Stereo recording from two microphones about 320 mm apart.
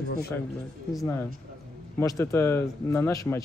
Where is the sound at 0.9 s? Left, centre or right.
Centre.